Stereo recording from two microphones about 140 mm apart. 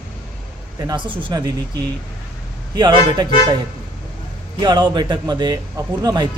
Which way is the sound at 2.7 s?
30° right (ahead or behind).